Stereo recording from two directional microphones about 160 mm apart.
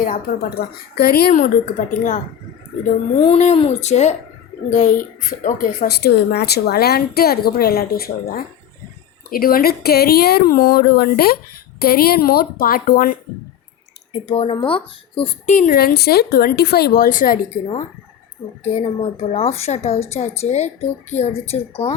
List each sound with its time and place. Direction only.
0.0 s a woman's voice: 65° left (ahead or behind)
3.2 s a woman's voice: 40° left (ahead or behind); by 13.1 s 60° left (ahead or behind)
14.1 s a woman's voice: 35° left (ahead or behind)
15.5 s a woman's voice: 60° left (ahead or behind)
18.7 s a woman's voice: 40° left (ahead or behind)